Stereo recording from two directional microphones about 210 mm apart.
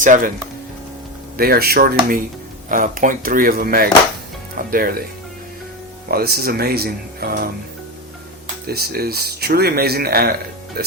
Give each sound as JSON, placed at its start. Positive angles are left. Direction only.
{"t": 0.0, "sound": "speech", "side_deg": -40}
{"t": 1.4, "sound": "speech", "side_deg": -45}
{"t": 6.1, "sound": "speech", "side_deg": -45}
{"t": 8.6, "sound": "speech", "side_deg": -45}